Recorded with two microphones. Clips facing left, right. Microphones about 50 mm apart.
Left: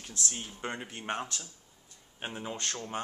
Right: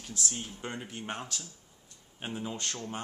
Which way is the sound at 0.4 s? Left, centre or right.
Left.